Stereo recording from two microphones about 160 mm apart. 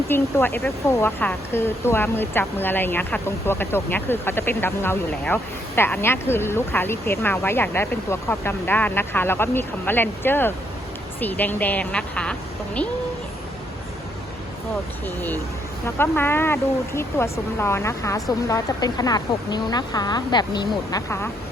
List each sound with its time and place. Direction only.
0.1 s a woman's voice: 15° left (ahead or behind)
15.0 s a woman's voice: 10° left (ahead or behind); by 21.0 s 25° left (ahead or behind)